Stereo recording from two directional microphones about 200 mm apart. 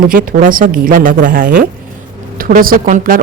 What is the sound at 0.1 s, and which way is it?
Speech, 45° right (ahead or behind).